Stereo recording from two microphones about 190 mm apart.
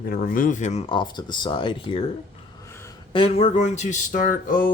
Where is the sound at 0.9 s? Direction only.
25° left (ahead or behind).